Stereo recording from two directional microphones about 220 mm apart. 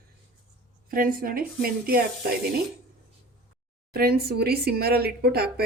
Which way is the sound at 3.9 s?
45° right (ahead or behind).